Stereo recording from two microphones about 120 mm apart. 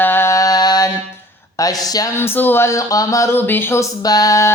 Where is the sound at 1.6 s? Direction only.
30° left (ahead or behind).